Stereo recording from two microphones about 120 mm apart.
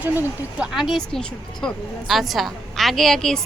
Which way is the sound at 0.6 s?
5° right (ahead or behind).